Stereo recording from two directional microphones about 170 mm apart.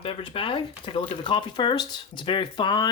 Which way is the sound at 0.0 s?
30° left (ahead or behind).